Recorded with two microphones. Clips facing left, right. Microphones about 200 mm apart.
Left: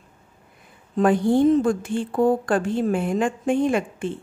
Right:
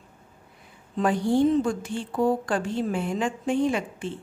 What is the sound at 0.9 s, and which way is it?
A woman's voice, 50° left (ahead or behind).